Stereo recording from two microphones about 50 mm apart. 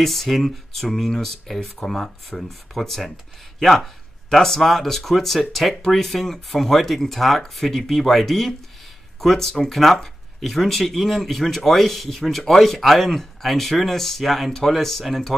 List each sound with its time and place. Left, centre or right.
0.0 s speech: centre